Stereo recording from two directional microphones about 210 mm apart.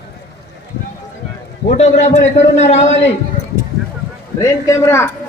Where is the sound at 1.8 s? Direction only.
30° left (ahead or behind).